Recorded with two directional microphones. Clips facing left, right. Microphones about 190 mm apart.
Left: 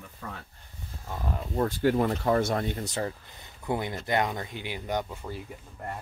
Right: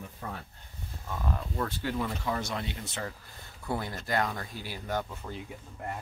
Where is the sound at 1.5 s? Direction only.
45° left (ahead or behind).